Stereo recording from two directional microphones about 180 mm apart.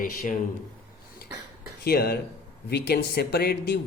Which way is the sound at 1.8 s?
60° left (ahead or behind).